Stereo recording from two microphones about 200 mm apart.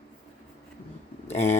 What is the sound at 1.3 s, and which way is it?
Speech, 35° left (ahead or behind).